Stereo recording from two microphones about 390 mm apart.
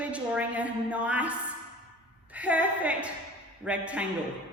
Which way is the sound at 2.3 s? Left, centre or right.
Centre.